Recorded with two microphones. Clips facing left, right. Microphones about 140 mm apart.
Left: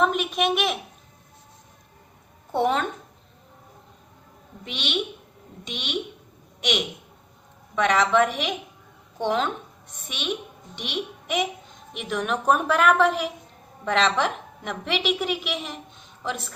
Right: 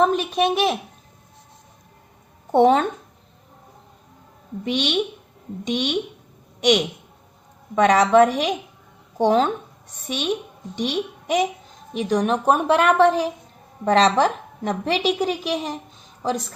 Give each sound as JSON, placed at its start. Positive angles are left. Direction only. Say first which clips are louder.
{"t": 0.0, "sound": "a woman's voice", "louder": "right 4 dB", "side_deg": -35}
{"t": 2.5, "sound": "a woman's voice", "louder": "right 8 dB", "side_deg": -55}
{"t": 4.7, "sound": "a woman's voice", "louder": "right 7 dB", "side_deg": -45}